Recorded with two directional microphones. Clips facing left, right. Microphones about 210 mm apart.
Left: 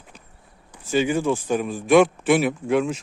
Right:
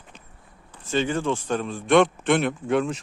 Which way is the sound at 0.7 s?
10° left (ahead or behind).